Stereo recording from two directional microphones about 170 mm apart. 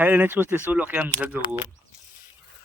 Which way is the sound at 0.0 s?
10° right (ahead or behind).